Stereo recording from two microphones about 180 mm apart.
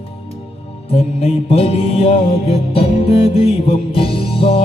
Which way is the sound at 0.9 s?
35° left (ahead or behind).